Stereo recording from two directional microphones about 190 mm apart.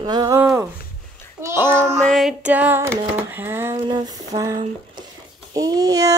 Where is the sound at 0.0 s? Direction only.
20° right (ahead or behind).